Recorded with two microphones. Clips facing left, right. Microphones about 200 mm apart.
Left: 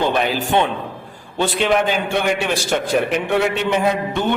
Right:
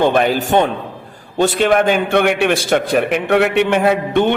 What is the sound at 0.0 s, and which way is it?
A man's voice, 50° right (ahead or behind).